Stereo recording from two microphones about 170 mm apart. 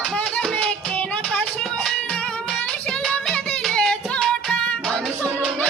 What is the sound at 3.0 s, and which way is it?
Music, 5° left (ahead or behind).